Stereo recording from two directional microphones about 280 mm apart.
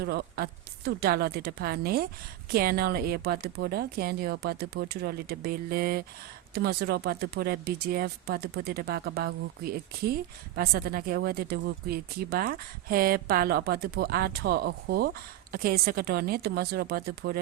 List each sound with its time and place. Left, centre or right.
0.0 s speech: right